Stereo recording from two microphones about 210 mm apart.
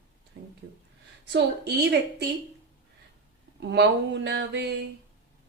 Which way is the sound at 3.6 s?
55° right (ahead or behind).